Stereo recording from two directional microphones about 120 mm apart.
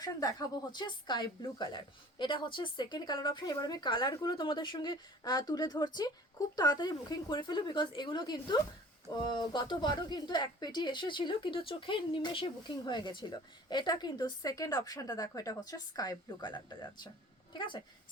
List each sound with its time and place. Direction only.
0.0 s speech: 35° left (ahead or behind)